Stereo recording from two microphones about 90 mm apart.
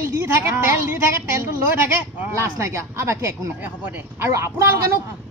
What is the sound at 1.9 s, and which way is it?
Speech, 20° right (ahead or behind).